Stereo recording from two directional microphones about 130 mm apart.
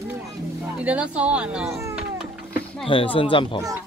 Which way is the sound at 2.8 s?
40° left (ahead or behind).